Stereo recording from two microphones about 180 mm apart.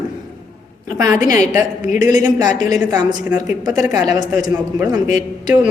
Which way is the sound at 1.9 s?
45° left (ahead or behind).